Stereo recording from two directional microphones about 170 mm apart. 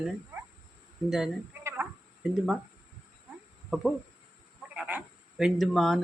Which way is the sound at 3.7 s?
5° right (ahead or behind).